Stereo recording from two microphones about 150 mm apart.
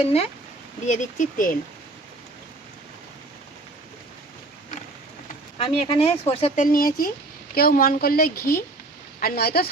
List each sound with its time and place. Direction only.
0.0 s speech: 45° left (ahead or behind)
0.9 s speech: 55° left (ahead or behind)
5.5 s speech: 35° left (ahead or behind)
6.6 s speech: 70° left (ahead or behind); by 9.6 s 90° left